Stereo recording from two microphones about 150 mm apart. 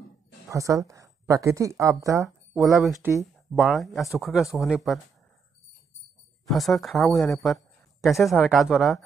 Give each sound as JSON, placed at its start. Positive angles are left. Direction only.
{"t": 0.5, "sound": "a woman's voice", "side_deg": -20}
{"t": 2.7, "sound": "speech", "side_deg": 0}
{"t": 6.5, "sound": "speech", "side_deg": 0}